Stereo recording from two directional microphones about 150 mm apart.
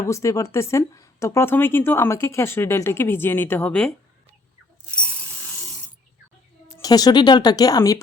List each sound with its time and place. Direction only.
0.0 s speech: 20° left (ahead or behind)
4.9 s a sound: 10° left (ahead or behind)
6.7 s speech: 25° left (ahead or behind)